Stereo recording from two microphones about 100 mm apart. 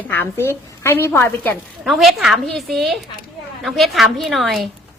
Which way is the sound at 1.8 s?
Centre (ahead or behind).